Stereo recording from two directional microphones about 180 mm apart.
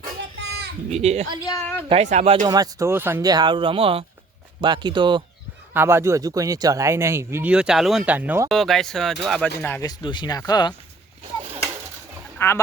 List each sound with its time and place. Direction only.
0.2 s a sound: 70° right (ahead or behind)
0.9 s speech: 35° right (ahead or behind)
1.5 s a woman's voice: 15° left (ahead or behind)
1.9 s speech: 40° right (ahead or behind)
2.5 s speech: 20° right (ahead or behind)
5.7 s speech: 15° right (ahead or behind)
8.4 s a woman's voice: centre (ahead or behind)
9.8 s speech: 25° left (ahead or behind)
12.4 s a woman's voice: 15° left (ahead or behind)